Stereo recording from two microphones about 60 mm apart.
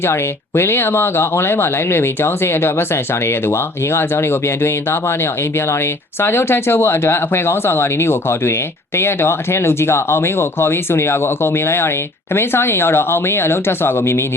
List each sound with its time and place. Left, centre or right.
0.0 s speech: left